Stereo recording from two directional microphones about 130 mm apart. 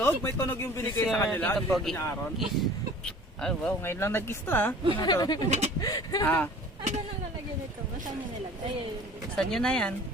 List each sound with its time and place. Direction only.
0.0 s speech: 20° left (ahead or behind)
3.8 s speech: 20° left (ahead or behind)
4.9 s speech: 30° left (ahead or behind)
5.5 s speech: 60° right (ahead or behind)
5.8 s speech: 30° left (ahead or behind)
6.2 s speech: 15° left (ahead or behind)
9.3 s speech: 5° left (ahead or behind)